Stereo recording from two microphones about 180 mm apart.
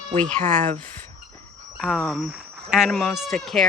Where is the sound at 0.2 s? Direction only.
5° left (ahead or behind).